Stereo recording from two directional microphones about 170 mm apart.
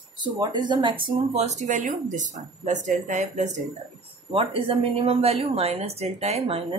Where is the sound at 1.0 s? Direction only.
40° right (ahead or behind).